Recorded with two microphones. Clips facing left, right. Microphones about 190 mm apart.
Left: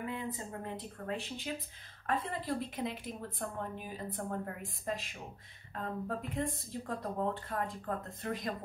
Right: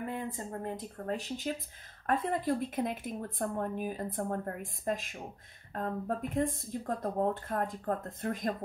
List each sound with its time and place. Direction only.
0.0 s speech: 50° right (ahead or behind)